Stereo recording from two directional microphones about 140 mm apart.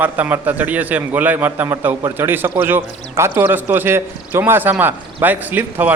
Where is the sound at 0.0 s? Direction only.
10° right (ahead or behind).